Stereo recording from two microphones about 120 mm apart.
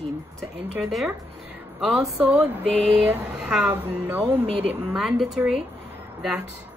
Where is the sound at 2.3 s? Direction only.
15° right (ahead or behind).